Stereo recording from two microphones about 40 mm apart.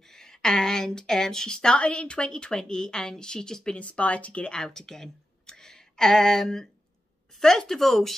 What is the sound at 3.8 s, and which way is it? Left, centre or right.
Speech, left.